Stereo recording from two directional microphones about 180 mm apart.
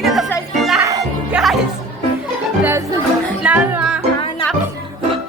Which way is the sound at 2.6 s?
15° right (ahead or behind).